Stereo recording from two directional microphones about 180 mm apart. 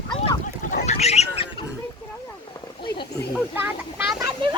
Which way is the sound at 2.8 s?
25° left (ahead or behind).